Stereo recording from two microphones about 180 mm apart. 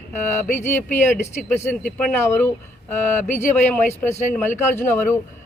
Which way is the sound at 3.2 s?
45° left (ahead or behind).